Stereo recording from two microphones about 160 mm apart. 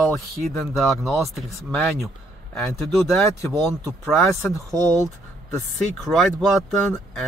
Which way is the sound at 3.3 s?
20° left (ahead or behind).